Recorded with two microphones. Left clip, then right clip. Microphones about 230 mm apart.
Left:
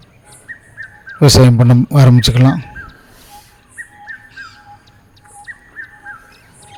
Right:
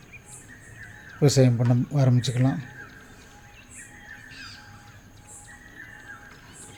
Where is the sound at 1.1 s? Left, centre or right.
Left.